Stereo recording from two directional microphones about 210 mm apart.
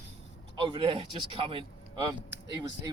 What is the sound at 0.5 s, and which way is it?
Speech, 20° right (ahead or behind).